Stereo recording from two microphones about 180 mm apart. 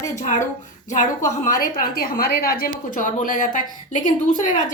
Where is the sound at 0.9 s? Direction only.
45° left (ahead or behind).